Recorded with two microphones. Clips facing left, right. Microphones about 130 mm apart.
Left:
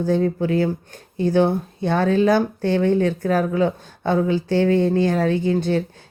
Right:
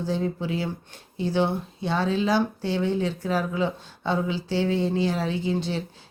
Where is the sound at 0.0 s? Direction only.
50° left (ahead or behind).